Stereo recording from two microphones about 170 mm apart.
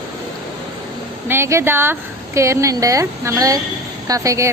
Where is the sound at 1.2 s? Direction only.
15° right (ahead or behind).